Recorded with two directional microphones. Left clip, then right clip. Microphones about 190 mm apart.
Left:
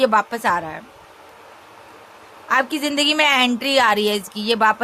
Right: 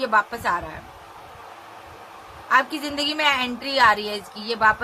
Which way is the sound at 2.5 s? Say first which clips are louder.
Left 1 dB; 50° left (ahead or behind).